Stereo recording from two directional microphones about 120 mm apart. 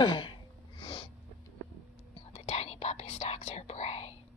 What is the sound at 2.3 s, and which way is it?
Whispering, 60° left (ahead or behind).